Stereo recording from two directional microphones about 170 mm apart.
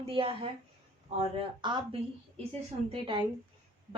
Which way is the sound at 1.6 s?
25° right (ahead or behind).